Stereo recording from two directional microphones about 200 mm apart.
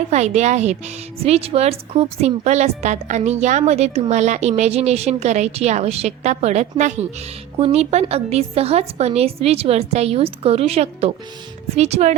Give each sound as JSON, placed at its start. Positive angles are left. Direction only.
{"t": 0.1, "sound": "a woman's voice", "side_deg": -35}